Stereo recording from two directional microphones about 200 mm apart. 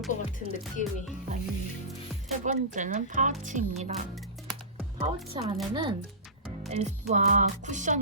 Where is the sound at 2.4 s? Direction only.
40° right (ahead or behind).